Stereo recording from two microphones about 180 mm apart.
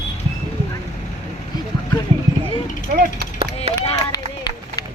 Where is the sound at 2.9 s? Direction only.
55° right (ahead or behind).